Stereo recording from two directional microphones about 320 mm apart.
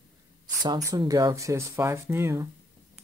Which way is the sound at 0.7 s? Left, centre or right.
Centre.